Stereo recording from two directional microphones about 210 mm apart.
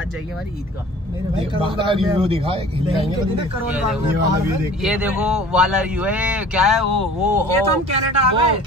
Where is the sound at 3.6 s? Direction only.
5° right (ahead or behind).